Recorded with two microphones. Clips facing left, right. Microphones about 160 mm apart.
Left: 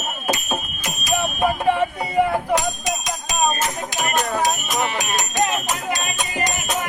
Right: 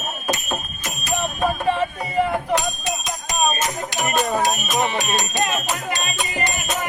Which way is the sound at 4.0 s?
5° right (ahead or behind).